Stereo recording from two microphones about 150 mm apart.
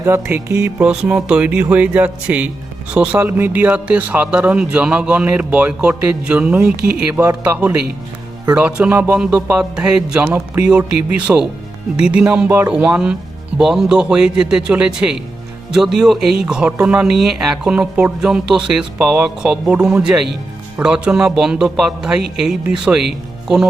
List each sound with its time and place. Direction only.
0.0 s speech: 15° right (ahead or behind)
10.2 s a man's voice: 20° right (ahead or behind)
11.3 s speech: 10° right (ahead or behind)